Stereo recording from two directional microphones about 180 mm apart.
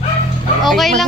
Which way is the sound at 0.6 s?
Centre (ahead or behind).